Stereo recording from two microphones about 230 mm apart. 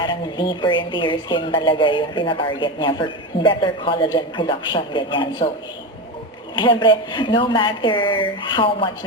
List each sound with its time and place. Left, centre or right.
0.0 s a woman's voice: centre
6.6 s a woman's voice: left